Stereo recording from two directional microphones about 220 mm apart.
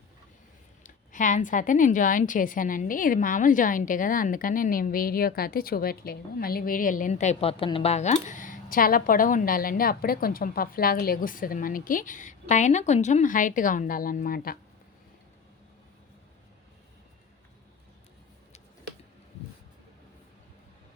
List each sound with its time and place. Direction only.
0.9 s a woman's voice: 35° left (ahead or behind)